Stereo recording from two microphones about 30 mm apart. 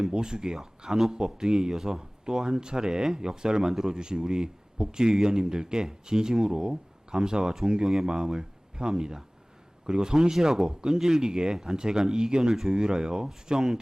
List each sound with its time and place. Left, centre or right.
0.1 s speech: right
1.7 s speech: centre
2.0 s speech: right
3.7 s speech: centre
3.9 s speech: right